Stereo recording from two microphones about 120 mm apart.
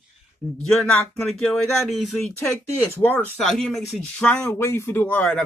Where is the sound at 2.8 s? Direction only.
15° left (ahead or behind).